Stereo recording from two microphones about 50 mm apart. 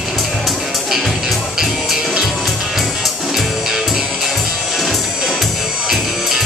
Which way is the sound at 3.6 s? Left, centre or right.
Centre.